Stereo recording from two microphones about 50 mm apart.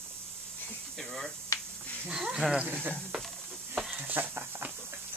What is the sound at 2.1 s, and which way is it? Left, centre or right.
Speech, centre.